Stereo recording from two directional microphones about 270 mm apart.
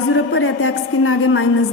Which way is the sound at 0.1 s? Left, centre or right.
Left.